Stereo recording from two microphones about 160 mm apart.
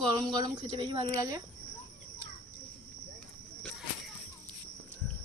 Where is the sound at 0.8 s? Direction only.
30° right (ahead or behind).